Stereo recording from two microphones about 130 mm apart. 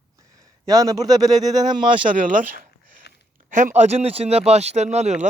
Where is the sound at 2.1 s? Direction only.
90° right.